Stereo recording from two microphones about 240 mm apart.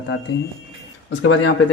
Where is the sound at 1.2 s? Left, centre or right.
Left.